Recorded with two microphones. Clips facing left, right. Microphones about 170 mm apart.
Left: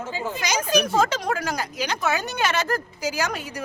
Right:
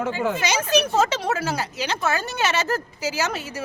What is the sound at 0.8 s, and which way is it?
Speech, 5° right (ahead or behind).